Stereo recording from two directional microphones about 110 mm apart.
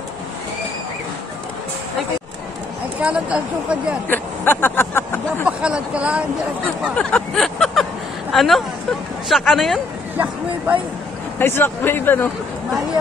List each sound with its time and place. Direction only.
3.0 s speech: 10° right (ahead or behind)
4.1 s speech: 20° left (ahead or behind)
5.6 s speech: 10° right (ahead or behind)
7.0 s vehicle: 10° left (ahead or behind)
8.3 s speech: centre (ahead or behind)
10.1 s speech: 15° right (ahead or behind)
11.3 s speech: 20° left (ahead or behind)